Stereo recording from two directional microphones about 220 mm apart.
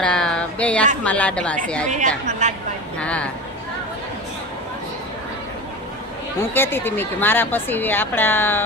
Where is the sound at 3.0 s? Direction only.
5° left (ahead or behind).